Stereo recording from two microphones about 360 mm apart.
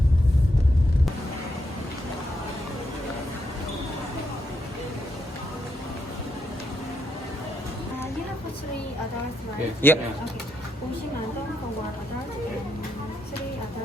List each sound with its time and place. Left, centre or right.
9.8 s speech: centre